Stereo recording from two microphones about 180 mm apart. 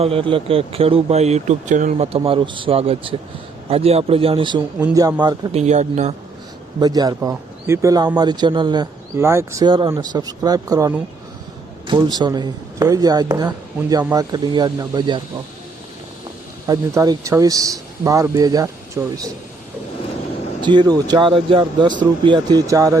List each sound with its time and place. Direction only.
0.0 s speech: 30° right (ahead or behind)
5.5 s speech: 40° right (ahead or behind)
6.7 s speech: 20° right (ahead or behind)
16.6 s speech: 20° right (ahead or behind)
20.6 s speech: 25° right (ahead or behind)